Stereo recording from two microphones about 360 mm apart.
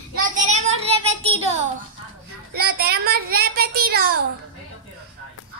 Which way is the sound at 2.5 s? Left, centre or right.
Right.